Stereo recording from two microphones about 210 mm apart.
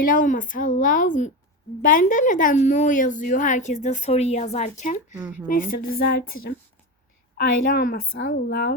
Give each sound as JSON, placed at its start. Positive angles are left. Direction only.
{"t": 0.0, "sound": "a woman's voice", "side_deg": 40}
{"t": 5.1, "sound": "speech", "side_deg": -10}
{"t": 5.9, "sound": "a woman's voice", "side_deg": 50}
{"t": 7.3, "sound": "a woman's voice", "side_deg": 45}